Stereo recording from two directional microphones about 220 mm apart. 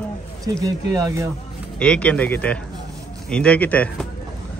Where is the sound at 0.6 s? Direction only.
15° right (ahead or behind).